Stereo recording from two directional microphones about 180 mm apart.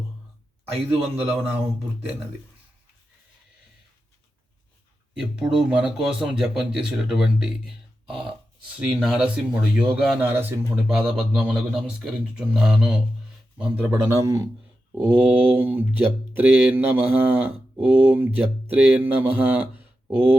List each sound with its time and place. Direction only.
1.2 s speech: 10° right (ahead or behind)
5.2 s speech: 5° right (ahead or behind)
8.7 s speech: 5° right (ahead or behind)
13.9 s speech: 15° right (ahead or behind)